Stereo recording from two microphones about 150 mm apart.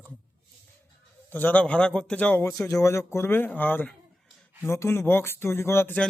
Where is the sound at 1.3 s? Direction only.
10° left (ahead or behind).